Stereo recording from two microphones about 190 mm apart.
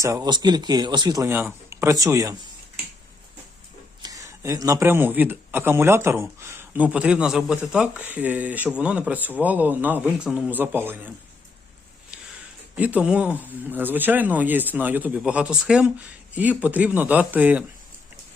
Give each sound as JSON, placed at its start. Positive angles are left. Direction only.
{"t": 0.0, "sound": "speech", "side_deg": -20}
{"t": 4.0, "sound": "speech", "side_deg": -20}
{"t": 12.7, "sound": "speech", "side_deg": -5}